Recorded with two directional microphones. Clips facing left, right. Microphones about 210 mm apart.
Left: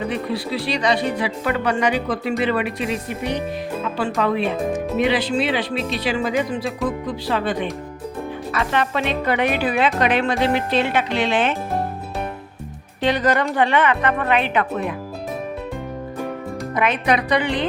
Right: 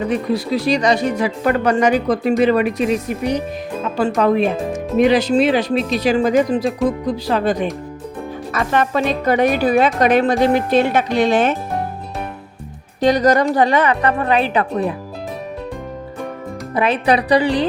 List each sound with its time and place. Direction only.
0.1 s speech: 45° right (ahead or behind)
13.0 s speech: 40° right (ahead or behind)
16.7 s speech: 35° right (ahead or behind)